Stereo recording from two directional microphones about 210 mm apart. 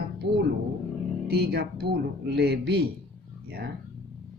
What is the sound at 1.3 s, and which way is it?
Speech, 50° right (ahead or behind).